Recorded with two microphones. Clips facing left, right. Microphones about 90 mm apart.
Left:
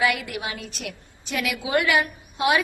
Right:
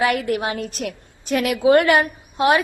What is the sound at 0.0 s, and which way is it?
A woman's voice, 45° right (ahead or behind).